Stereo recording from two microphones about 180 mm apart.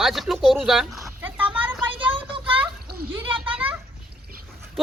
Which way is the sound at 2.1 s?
30° right (ahead or behind).